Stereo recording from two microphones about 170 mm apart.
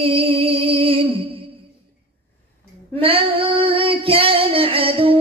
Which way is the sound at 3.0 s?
35° right (ahead or behind).